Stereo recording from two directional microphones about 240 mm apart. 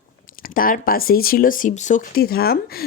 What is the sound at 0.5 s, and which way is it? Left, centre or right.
Speech, left.